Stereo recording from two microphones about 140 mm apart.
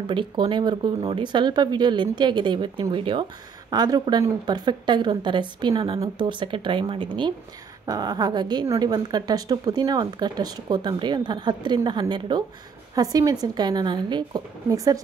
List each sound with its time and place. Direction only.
0.0 s speech: 35° right (ahead or behind)